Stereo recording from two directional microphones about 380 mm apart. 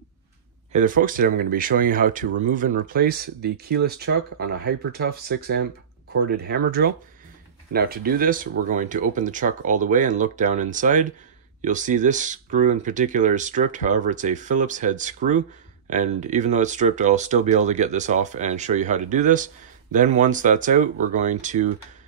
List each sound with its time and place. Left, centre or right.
0.7 s speech: right